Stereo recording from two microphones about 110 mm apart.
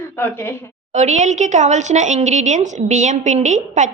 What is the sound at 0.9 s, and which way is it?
A woman's voice, 90° right.